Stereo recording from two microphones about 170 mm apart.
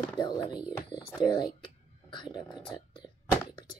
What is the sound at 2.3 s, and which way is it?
Speech, 25° left (ahead or behind).